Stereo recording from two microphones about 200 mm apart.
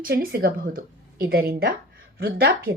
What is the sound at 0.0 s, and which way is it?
A woman's voice, 45° right (ahead or behind).